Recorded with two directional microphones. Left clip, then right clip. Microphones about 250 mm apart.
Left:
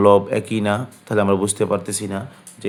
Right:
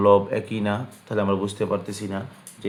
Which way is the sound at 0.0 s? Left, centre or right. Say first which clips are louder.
Left 4 dB; left.